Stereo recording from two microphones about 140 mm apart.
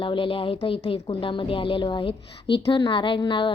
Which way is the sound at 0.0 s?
40° left (ahead or behind).